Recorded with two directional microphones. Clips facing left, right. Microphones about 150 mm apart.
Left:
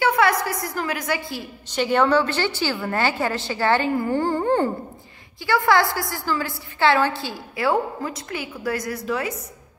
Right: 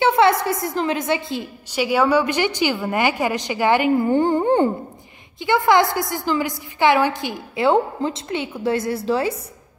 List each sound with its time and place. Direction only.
0.0 s a woman's voice: 25° right (ahead or behind)
1.7 s a woman's voice: 10° right (ahead or behind); by 9.4 s 30° right (ahead or behind)